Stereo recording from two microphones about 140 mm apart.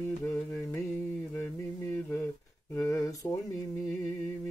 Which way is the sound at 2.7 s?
25° left (ahead or behind).